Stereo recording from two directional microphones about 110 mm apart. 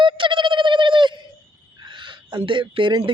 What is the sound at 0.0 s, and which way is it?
Bird, 50° right (ahead or behind).